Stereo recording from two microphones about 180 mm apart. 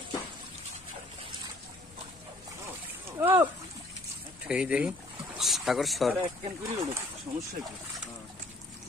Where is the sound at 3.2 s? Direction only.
10° right (ahead or behind).